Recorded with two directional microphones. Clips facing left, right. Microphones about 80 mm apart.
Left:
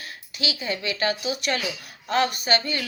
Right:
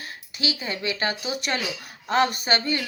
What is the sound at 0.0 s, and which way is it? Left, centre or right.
A woman's voice, right.